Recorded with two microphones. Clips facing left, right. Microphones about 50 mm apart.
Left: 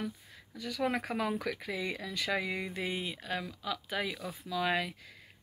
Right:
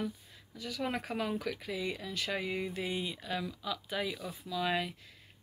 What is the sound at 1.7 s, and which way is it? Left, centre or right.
Speech, left.